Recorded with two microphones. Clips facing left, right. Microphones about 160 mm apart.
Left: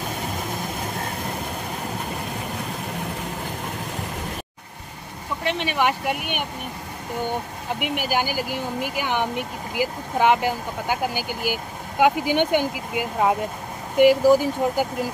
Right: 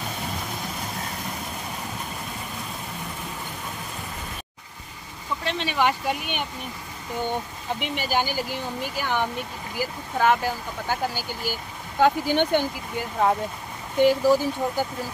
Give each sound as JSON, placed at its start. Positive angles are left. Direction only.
{"t": 5.4, "sound": "speech", "side_deg": 15}
{"t": 7.8, "sound": "speech", "side_deg": 10}